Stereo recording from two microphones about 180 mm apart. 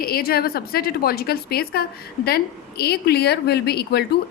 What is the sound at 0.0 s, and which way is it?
A woman's voice, 55° left (ahead or behind).